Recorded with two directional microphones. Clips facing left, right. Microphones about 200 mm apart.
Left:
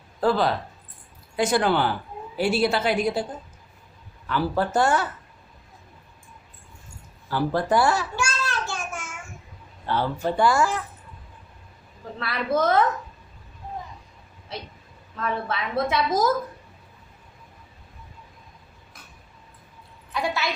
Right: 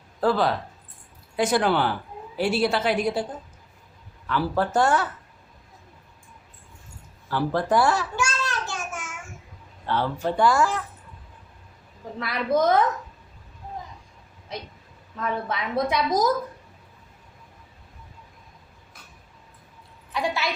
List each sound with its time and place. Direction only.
0.2 s speech: centre (ahead or behind)
4.3 s speech: centre (ahead or behind)
7.3 s speech: 5° left (ahead or behind)
8.1 s a sound: 15° right (ahead or behind)
9.8 s speech: 5° left (ahead or behind)
12.2 s a woman's voice: 15° right (ahead or behind)
15.1 s a woman's voice: 15° right (ahead or behind)